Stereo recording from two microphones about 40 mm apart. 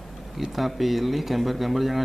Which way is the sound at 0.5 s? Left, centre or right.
Centre.